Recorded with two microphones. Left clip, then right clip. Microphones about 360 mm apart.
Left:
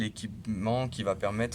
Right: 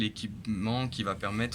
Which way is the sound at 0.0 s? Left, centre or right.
Left.